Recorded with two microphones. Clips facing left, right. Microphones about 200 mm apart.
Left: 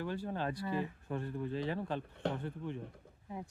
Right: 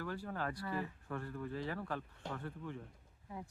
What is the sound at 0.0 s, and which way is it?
Speech, 25° left (ahead or behind).